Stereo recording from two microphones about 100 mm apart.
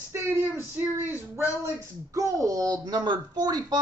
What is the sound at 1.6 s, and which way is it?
Speech, 35° right (ahead or behind).